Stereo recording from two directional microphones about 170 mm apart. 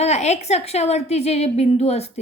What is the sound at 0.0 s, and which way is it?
A woman's voice, 40° left (ahead or behind).